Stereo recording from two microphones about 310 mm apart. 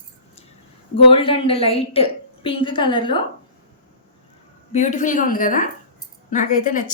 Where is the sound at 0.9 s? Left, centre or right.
Centre.